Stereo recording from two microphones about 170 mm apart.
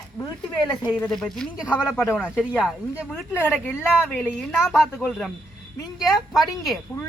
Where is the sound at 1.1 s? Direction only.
5° left (ahead or behind).